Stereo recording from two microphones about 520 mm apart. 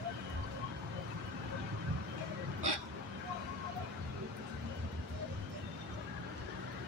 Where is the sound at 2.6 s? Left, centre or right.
Right.